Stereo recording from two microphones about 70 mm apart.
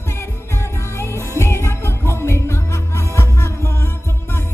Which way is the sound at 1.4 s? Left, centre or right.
Left.